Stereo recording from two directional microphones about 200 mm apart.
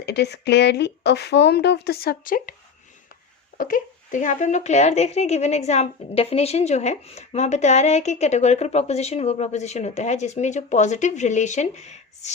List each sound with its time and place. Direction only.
0.0 s speech: 55° left (ahead or behind)
3.6 s speech: 40° left (ahead or behind)